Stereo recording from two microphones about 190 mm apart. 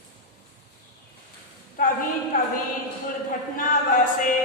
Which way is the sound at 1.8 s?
45° left (ahead or behind).